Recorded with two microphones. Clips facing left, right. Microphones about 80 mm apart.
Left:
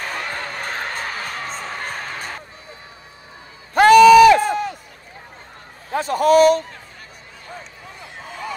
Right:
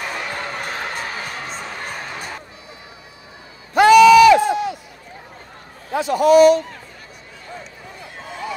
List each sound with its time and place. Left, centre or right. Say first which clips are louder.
0.0 s crowd: right 1 dB; left
3.7 s a sound: even; left
5.9 s a man's voice: right 2 dB; left